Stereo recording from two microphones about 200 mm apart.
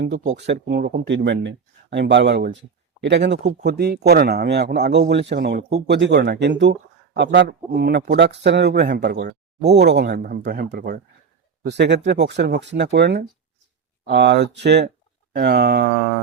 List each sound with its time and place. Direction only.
0.3 s speech: 60° right (ahead or behind)
8.9 s speech: 40° right (ahead or behind)
9.1 s speech: 55° right (ahead or behind)